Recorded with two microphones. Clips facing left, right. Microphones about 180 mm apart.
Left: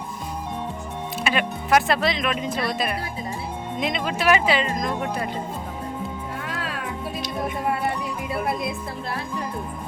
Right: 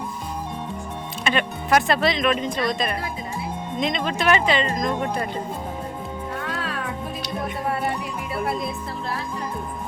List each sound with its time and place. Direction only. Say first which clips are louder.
1.2 s speech: right 1 dB; 5° left (ahead or behind)